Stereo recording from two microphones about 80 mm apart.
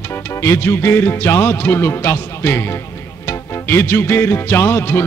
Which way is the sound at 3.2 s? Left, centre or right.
Left.